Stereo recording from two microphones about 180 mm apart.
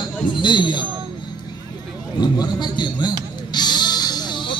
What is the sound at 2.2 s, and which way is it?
Music, 25° left (ahead or behind).